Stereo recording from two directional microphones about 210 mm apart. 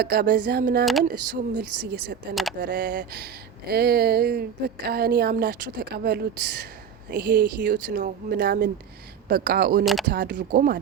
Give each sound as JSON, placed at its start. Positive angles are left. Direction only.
{"t": 0.0, "sound": "a woman's voice", "side_deg": -45}
{"t": 1.1, "sound": "speech", "side_deg": -90}
{"t": 1.8, "sound": "a woman's voice", "side_deg": -50}
{"t": 2.3, "sound": "speech", "side_deg": 0}
{"t": 2.6, "sound": "a woman's voice", "side_deg": -55}
{"t": 9.8, "sound": "speech", "side_deg": 0}
{"t": 10.1, "sound": "a woman's voice", "side_deg": -55}